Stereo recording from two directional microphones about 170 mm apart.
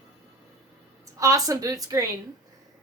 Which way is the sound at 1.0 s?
20° right (ahead or behind).